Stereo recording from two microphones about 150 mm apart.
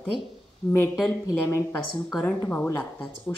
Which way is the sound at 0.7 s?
15° left (ahead or behind).